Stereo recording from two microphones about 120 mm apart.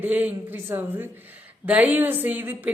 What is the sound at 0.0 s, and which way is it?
Speech, 15° right (ahead or behind).